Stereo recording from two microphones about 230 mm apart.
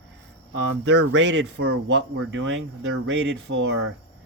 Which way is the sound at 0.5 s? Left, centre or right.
Right.